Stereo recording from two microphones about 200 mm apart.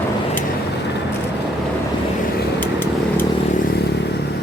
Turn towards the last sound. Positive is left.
turn(degrees=10)  # may be behind; listen again after turning